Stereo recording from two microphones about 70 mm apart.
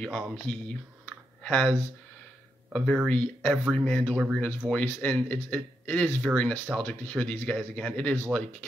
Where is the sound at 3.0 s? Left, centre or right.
Left.